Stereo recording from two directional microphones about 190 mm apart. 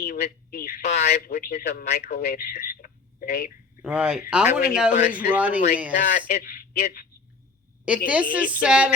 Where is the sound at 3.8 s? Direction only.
5° right (ahead or behind).